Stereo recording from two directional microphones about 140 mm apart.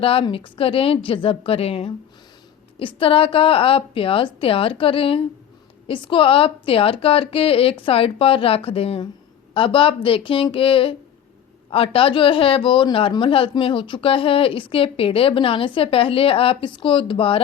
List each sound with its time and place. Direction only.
0.0 s speech: 40° left (ahead or behind)